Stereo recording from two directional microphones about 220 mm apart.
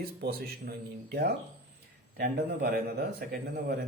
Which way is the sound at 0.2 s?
45° right (ahead or behind).